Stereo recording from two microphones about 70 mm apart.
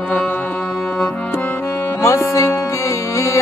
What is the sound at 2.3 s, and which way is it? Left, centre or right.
Music, left.